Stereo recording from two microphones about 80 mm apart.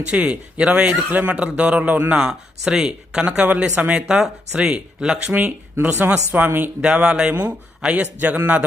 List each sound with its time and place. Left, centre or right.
0.1 s speech: centre